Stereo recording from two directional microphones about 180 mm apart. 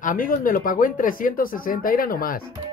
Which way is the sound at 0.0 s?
50° left (ahead or behind).